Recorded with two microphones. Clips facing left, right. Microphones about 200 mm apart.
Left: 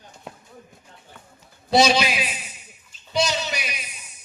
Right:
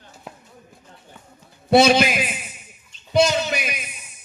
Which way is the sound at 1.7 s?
55° right (ahead or behind).